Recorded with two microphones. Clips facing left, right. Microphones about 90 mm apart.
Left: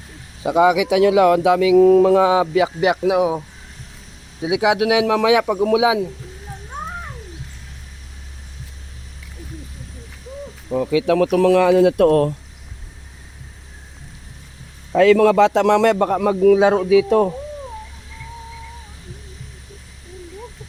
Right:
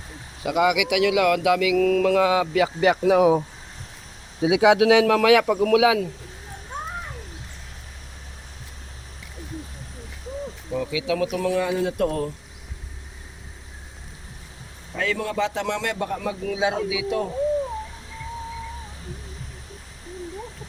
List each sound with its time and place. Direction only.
0.4 s speech: 30° left (ahead or behind); by 3.3 s 5° left (ahead or behind)
4.4 s a man's voice: centre (ahead or behind); by 6.1 s 20° left (ahead or behind)
10.7 s speech: 40° left (ahead or behind); by 12.3 s 90° left
14.9 s a man's voice: 90° left; by 17.2 s 45° left (ahead or behind)